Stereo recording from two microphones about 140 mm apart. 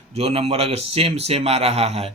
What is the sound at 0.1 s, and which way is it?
Speech, 45° right (ahead or behind).